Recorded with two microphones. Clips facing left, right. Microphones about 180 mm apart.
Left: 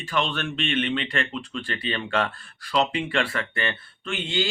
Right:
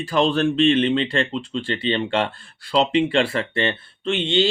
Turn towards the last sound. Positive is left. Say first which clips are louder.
# right 7 dB
turn(degrees=-30)  # may be behind; listen again after turning